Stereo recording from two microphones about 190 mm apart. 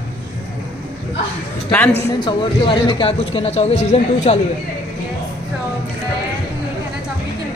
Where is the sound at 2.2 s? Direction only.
25° left (ahead or behind).